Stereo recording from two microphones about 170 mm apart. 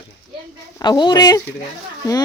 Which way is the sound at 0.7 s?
25° left (ahead or behind).